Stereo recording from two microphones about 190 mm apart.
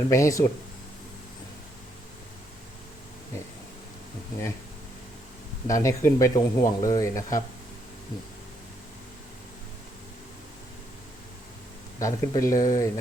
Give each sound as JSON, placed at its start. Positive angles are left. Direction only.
{"t": 0.1, "sound": "a man's voice", "side_deg": 15}
{"t": 5.6, "sound": "a man's voice", "side_deg": 15}
{"t": 11.9, "sound": "a man's voice", "side_deg": 15}